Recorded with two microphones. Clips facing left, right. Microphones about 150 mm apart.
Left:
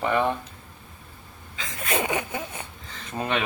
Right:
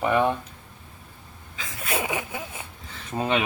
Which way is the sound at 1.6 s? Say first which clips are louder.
Left 2 dB; centre (ahead or behind).